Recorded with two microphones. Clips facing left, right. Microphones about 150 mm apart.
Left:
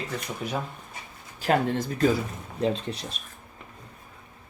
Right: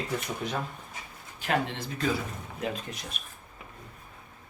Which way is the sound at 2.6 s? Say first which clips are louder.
Left 8 dB; 30° left (ahead or behind).